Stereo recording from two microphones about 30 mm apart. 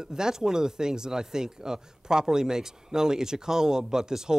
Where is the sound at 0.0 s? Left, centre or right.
Right.